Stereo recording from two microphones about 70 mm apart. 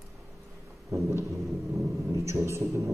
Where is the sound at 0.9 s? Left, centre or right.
Right.